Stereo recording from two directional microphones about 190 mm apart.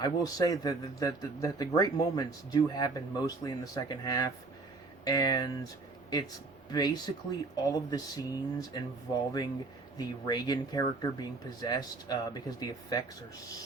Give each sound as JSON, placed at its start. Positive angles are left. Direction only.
{"t": 0.0, "sound": "speech", "side_deg": 20}
{"t": 6.7, "sound": "speech", "side_deg": 20}
{"t": 10.0, "sound": "speech", "side_deg": 20}